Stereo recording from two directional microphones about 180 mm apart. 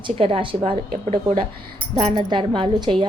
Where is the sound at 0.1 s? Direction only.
30° right (ahead or behind).